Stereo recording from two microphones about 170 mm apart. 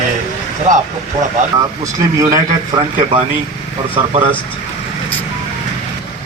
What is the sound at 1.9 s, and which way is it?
Speech, 20° right (ahead or behind).